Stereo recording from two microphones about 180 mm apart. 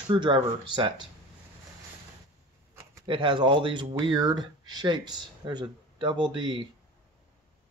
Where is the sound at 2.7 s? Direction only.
15° right (ahead or behind).